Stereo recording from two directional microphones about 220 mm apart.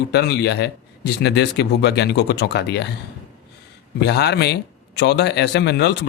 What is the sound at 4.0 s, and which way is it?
Speech, 50° left (ahead or behind).